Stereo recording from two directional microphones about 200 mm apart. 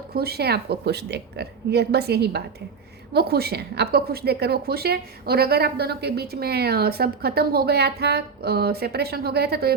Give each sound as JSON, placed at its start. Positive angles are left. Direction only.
{"t": 0.1, "sound": "a woman's voice", "side_deg": -50}